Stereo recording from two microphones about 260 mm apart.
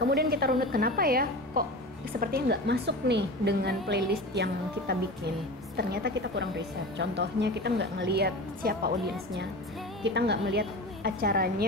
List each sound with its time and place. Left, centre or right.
0.1 s a woman's voice: right
10.0 s a woman's voice: right